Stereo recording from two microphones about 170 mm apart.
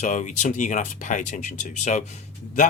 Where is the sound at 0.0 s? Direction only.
45° left (ahead or behind).